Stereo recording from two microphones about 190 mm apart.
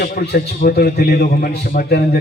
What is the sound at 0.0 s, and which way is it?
A man's voice, 50° left (ahead or behind).